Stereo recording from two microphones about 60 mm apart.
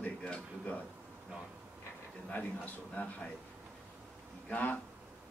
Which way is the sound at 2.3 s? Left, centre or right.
Left.